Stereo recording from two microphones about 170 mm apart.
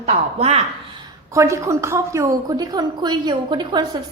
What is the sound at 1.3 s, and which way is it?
A woman's voice, 15° right (ahead or behind).